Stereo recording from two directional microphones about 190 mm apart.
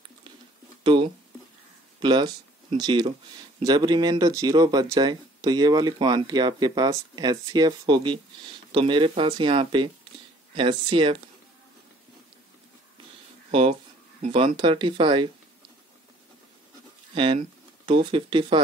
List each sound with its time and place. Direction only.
0.8 s speech: 25° right (ahead or behind)
13.5 s speech: 30° right (ahead or behind)
17.1 s speech: 25° right (ahead or behind)